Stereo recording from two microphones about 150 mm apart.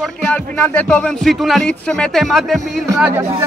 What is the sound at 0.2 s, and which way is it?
Speech, 10° left (ahead or behind).